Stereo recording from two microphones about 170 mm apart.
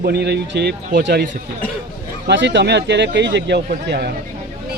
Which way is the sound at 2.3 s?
90° right.